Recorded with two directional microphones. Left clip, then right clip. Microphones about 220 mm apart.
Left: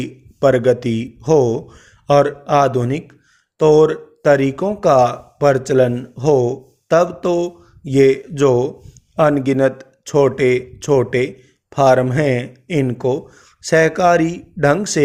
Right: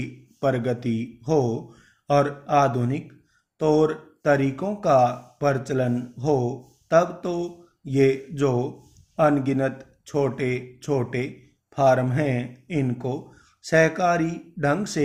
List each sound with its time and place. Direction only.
0.0 s speech: 45° left (ahead or behind)